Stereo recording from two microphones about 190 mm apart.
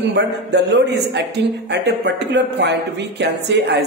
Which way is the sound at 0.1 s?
65° right (ahead or behind).